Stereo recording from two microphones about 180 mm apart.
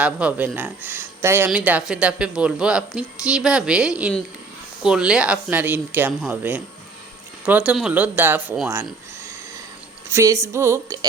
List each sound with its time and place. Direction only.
0.0 s speech: 5° right (ahead or behind)
10.1 s a sound: 15° right (ahead or behind)
10.4 s speech: 15° right (ahead or behind)